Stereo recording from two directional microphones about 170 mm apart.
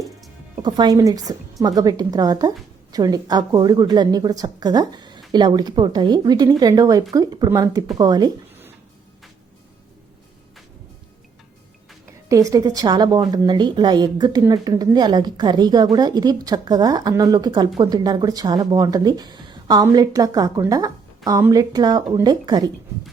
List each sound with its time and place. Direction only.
0.6 s a woman's voice: 25° right (ahead or behind)
12.0 s a woman's voice: 20° right (ahead or behind)